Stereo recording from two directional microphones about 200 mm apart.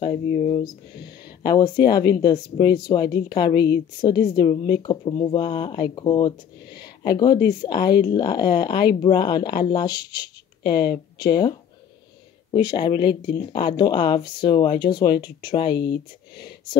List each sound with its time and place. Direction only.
0.0 s speech: 30° left (ahead or behind)
12.7 s speech: 25° left (ahead or behind)